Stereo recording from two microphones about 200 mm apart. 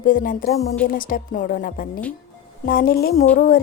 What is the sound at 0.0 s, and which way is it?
A woman's voice, 45° left (ahead or behind).